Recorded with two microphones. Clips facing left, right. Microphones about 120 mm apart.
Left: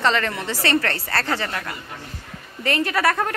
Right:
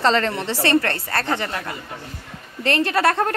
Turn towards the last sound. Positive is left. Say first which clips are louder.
# right 2 dB
turn(degrees=-30)  # may be behind; listen again after turning